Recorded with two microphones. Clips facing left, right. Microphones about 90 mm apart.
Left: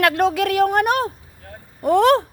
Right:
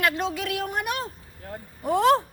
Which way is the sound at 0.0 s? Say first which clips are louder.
Left 8 dB; 65° left (ahead or behind).